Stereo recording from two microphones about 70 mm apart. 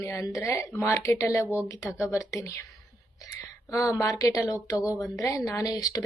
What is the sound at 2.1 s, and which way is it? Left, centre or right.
Speech, left.